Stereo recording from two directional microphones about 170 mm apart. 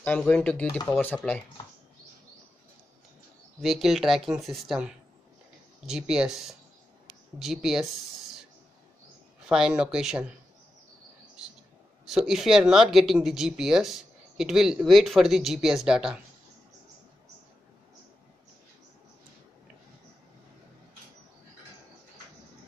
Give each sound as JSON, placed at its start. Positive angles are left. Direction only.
{"t": 0.0, "sound": "speech", "side_deg": 10}
{"t": 3.6, "sound": "speech", "side_deg": 0}
{"t": 9.5, "sound": "speech", "side_deg": -5}
{"t": 12.1, "sound": "speech", "side_deg": 0}